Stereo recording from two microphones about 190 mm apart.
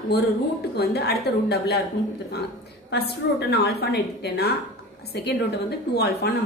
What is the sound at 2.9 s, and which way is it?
A woman's voice, 60° left (ahead or behind).